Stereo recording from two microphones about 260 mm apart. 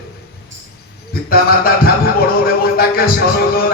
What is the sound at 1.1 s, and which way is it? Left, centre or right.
Speech, left.